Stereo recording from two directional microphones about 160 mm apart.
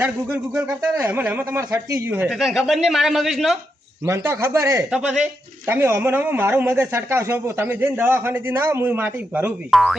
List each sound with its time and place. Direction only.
0.0 s speech: 10° right (ahead or behind)
2.3 s speech: centre (ahead or behind)
4.0 s speech: 15° right (ahead or behind)
4.9 s speech: 5° right (ahead or behind)
9.6 s speech: centre (ahead or behind)